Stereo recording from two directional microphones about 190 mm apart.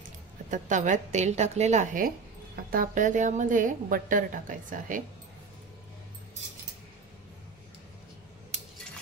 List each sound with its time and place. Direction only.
0.5 s a woman's voice: 40° right (ahead or behind)